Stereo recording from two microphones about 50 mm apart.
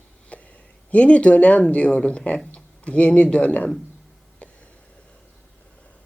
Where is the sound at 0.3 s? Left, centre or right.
Left.